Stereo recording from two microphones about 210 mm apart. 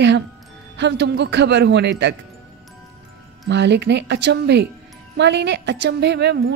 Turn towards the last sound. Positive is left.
turn(degrees=-55)  # may be behind; listen again after turning